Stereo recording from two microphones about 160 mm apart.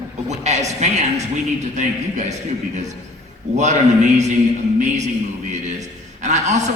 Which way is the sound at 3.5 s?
45° right (ahead or behind).